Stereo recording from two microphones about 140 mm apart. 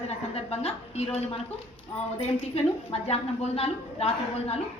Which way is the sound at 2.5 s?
45° left (ahead or behind).